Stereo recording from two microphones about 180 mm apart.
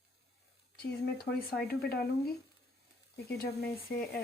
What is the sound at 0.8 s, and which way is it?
Speech, 60° left (ahead or behind).